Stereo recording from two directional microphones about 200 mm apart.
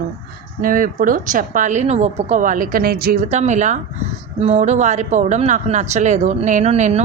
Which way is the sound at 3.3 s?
35° right (ahead or behind).